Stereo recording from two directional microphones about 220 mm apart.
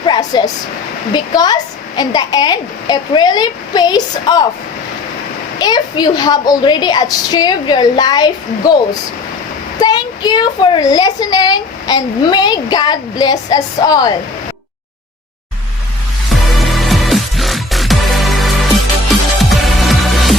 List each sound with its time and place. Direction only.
0.0 s a sound: 20° left (ahead or behind)
1.1 s a woman's voice: 20° left (ahead or behind)
5.5 s a woman's voice: 20° left (ahead or behind)
16.5 s music: centre (ahead or behind)